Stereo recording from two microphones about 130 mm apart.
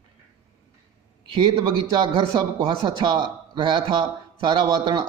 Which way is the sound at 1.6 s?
30° right (ahead or behind).